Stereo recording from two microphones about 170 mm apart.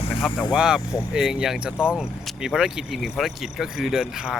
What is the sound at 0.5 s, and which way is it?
Speech, 5° right (ahead or behind).